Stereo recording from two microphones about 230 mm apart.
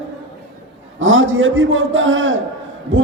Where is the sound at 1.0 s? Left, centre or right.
Right.